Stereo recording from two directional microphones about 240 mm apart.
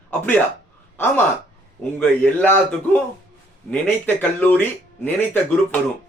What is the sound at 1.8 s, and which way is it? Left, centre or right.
Speech, centre.